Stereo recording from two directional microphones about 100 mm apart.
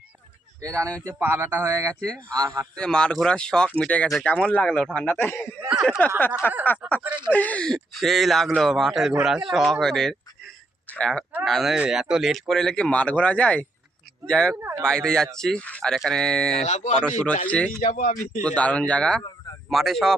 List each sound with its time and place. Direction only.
0.6 s a man's voice: 30° right (ahead or behind)
1.2 s a man's voice: 20° right (ahead or behind)
2.3 s a man's voice: 30° right (ahead or behind)
2.7 s speech: 10° left (ahead or behind)
5.6 s a sound: 5° right (ahead or behind)
6.1 s speech: 20° left (ahead or behind)
6.8 s speech: 5° right (ahead or behind)
7.3 s speech: 15° left (ahead or behind)
14.6 s a man's voice: 25° right (ahead or behind)
14.8 s speech: 5° left (ahead or behind)
16.6 s speech: 90° left
17.0 s speech: 10° left (ahead or behind)